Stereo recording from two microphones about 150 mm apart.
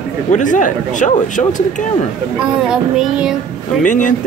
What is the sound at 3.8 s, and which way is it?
Speech, 60° left (ahead or behind).